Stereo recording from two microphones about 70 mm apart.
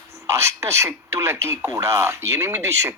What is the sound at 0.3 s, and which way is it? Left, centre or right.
Speech, right.